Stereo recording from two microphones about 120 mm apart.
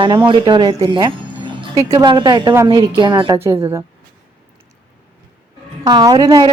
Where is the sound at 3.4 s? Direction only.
25° right (ahead or behind).